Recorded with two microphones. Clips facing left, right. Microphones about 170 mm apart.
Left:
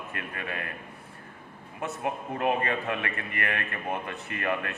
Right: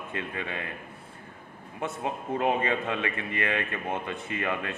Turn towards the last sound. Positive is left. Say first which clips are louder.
# even
turn(degrees=-20)  # may be behind; listen again after turning